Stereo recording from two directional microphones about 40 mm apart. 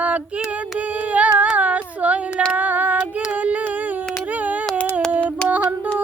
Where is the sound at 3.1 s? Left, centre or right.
Right.